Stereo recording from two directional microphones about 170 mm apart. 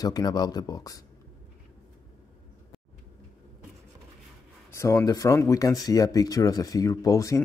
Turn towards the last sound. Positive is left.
turn(degrees=20)  # may be behind; listen again after turning